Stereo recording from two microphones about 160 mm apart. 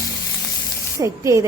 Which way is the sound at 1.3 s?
20° right (ahead or behind).